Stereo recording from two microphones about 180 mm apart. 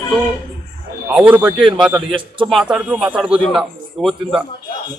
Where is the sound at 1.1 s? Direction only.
10° right (ahead or behind).